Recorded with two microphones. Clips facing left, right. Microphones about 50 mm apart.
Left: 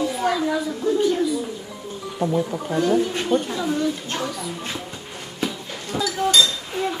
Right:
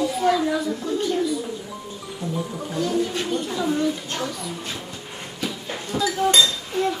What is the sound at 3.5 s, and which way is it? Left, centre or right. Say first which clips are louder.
Speech: even; centre.